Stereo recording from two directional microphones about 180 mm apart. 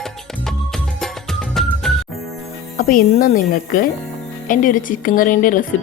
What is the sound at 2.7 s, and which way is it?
A woman's voice, 50° left (ahead or behind).